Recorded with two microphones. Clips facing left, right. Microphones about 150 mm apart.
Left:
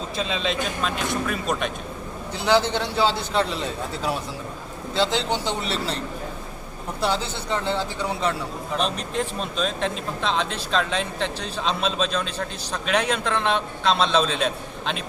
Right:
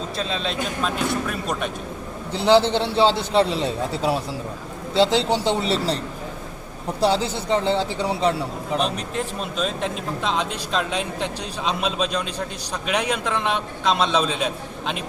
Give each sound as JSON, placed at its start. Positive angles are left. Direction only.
{"t": 0.2, "sound": "speech", "side_deg": 0}
{"t": 2.3, "sound": "a man's voice", "side_deg": -30}
{"t": 7.0, "sound": "a man's voice", "side_deg": -30}
{"t": 8.8, "sound": "speech", "side_deg": -5}